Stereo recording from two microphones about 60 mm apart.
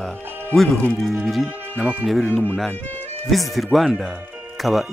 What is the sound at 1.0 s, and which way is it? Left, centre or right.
Speech, centre.